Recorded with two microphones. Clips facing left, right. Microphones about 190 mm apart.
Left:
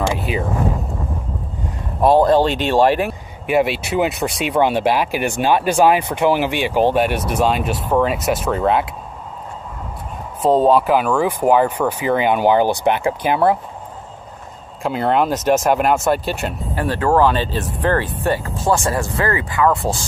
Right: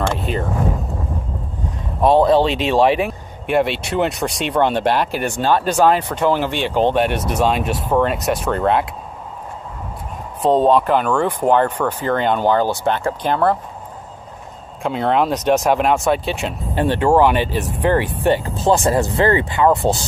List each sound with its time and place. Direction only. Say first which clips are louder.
0.3 s speech: even; 5° left (ahead or behind)
2.0 s speech: even; 5° left (ahead or behind)
10.4 s speech: even; centre (ahead or behind)
14.8 s speech: even; centre (ahead or behind)
16.7 s speech: right 2 dB; 20° right (ahead or behind)